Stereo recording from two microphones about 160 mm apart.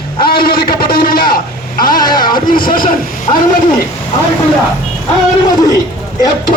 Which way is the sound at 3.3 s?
30° left (ahead or behind).